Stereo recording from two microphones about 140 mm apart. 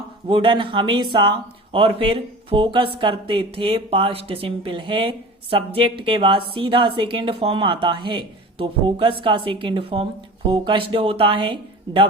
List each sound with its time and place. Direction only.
0.3 s speech: 35° right (ahead or behind)